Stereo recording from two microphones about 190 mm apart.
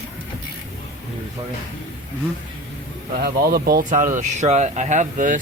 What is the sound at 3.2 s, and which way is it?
Speech, 55° right (ahead or behind).